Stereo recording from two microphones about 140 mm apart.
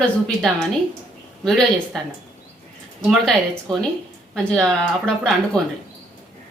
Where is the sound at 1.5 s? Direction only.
Centre (ahead or behind).